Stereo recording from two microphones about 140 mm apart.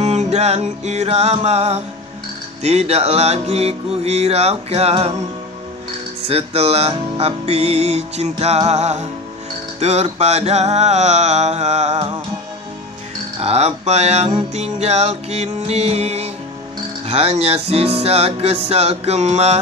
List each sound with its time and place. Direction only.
0.0 s music: 50° right (ahead or behind)
6.2 s music: 45° right (ahead or behind)
13.4 s music: 45° right (ahead or behind)